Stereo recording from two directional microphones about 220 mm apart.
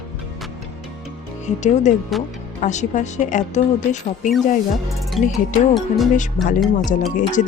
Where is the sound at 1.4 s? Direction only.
35° left (ahead or behind).